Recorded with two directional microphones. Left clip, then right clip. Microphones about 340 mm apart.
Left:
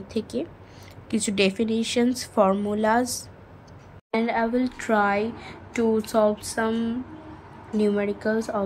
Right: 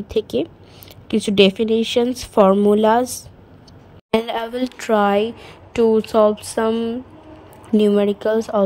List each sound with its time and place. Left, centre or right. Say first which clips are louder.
0.1 s speech: right 9 dB; right